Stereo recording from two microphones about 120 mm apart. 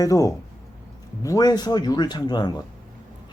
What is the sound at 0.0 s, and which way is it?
A man's voice, 30° left (ahead or behind).